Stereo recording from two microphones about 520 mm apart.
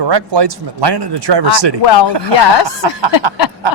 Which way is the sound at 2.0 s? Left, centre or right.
Right.